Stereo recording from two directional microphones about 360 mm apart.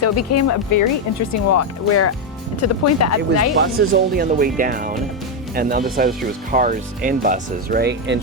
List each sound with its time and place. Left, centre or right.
0.0 s speech: left
3.8 s speech: right